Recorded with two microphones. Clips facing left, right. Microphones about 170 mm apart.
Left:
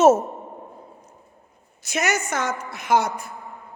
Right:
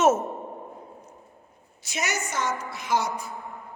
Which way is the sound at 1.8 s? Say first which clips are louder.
Left 6 dB; 50° left (ahead or behind).